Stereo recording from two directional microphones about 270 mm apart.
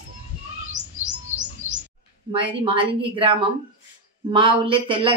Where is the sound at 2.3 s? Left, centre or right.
Centre.